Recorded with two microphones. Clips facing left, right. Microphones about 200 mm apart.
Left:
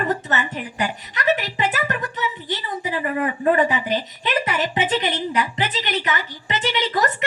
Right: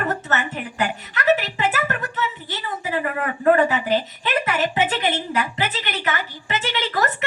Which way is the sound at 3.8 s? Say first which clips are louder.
Right 2 dB; 20° left (ahead or behind).